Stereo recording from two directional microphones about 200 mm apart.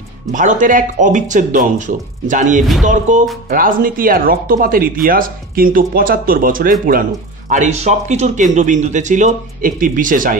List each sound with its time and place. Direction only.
0.3 s speech: 40° right (ahead or behind)